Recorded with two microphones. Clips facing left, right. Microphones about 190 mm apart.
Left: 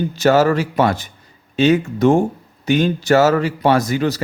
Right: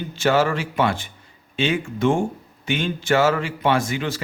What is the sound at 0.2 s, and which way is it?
Speech, 40° left (ahead or behind).